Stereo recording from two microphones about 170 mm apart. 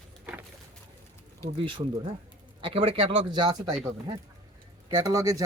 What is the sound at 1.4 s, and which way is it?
Speech, 30° right (ahead or behind).